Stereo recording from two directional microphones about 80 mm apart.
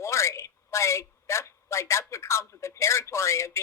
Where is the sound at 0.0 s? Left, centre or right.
Left.